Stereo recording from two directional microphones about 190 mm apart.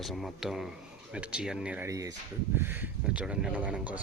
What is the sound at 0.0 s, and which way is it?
Speech, centre (ahead or behind).